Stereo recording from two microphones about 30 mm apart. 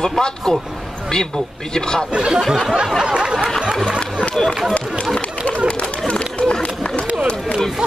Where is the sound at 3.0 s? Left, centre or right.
Right.